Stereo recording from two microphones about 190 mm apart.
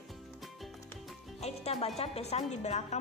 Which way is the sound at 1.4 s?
35° left (ahead or behind).